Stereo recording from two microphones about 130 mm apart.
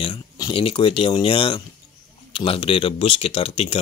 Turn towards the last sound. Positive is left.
turn(degrees=50)  # may be behind; listen again after turning